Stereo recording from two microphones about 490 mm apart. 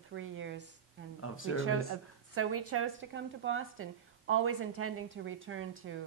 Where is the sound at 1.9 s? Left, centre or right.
Right.